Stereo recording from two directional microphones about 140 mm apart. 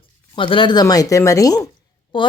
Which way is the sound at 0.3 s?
35° left (ahead or behind).